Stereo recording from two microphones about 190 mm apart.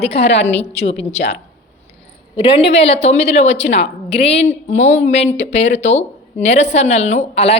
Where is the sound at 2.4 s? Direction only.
30° left (ahead or behind).